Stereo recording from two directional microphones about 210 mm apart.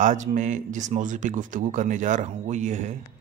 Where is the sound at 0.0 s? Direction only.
35° right (ahead or behind).